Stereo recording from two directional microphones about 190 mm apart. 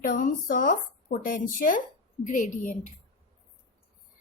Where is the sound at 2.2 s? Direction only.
45° left (ahead or behind).